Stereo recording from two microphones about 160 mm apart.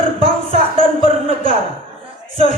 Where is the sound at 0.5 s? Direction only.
35° right (ahead or behind).